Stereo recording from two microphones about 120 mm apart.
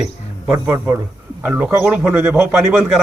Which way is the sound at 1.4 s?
15° right (ahead or behind).